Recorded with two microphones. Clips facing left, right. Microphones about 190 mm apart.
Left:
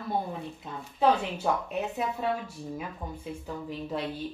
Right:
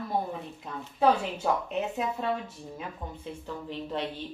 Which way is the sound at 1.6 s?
Centre (ahead or behind).